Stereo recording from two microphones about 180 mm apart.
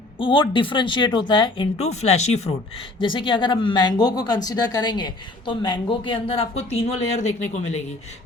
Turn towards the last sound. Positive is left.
turn(degrees=40)  # may be behind; listen again after turning